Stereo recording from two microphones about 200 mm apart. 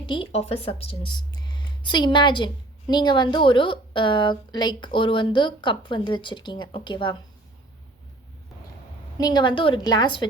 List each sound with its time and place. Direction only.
0.0 s speech: 30° left (ahead or behind)
9.1 s speech: 20° left (ahead or behind)